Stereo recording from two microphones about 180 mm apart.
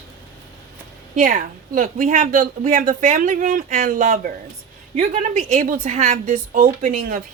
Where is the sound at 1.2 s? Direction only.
45° right (ahead or behind).